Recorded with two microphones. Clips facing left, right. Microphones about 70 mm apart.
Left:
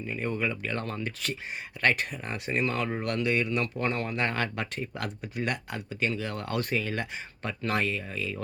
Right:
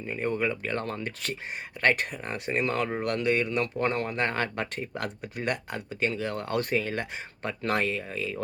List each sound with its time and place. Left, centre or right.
0.1 s speech: right
2.6 s speech: right